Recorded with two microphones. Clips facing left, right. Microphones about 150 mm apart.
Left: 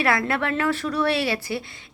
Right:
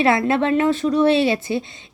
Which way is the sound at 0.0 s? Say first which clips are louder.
Right 6 dB; 20° right (ahead or behind).